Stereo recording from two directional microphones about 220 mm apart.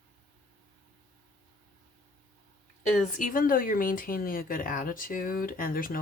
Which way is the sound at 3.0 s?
40° left (ahead or behind).